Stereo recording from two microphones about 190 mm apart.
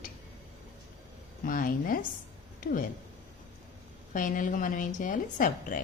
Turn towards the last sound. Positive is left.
turn(degrees=45)  # may be behind; listen again after turning